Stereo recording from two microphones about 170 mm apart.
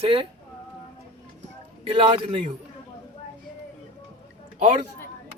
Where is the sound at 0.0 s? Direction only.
30° right (ahead or behind).